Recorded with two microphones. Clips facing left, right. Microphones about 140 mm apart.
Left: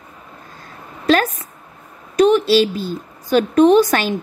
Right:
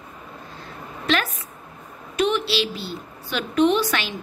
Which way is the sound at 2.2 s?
40° left (ahead or behind).